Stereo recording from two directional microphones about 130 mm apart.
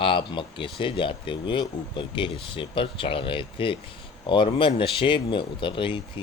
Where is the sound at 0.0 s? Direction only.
40° left (ahead or behind).